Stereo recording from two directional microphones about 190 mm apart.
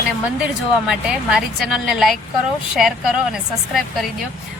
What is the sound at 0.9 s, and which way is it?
Speech, centre (ahead or behind).